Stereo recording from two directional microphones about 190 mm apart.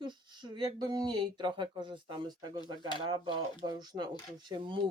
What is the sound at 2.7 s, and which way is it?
Speech, 25° left (ahead or behind).